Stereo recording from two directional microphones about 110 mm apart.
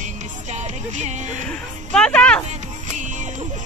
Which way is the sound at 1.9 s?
10° left (ahead or behind).